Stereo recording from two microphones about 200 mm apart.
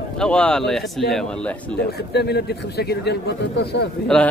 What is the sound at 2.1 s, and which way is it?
Speech, 55° left (ahead or behind).